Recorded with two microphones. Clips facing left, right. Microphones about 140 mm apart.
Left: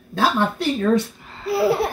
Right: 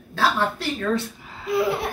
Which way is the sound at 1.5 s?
35° left (ahead or behind).